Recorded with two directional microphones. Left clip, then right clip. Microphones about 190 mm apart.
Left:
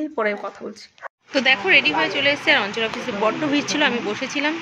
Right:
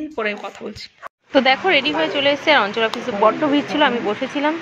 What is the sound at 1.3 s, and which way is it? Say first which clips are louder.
Speech: right 1 dB; 10° right (ahead or behind).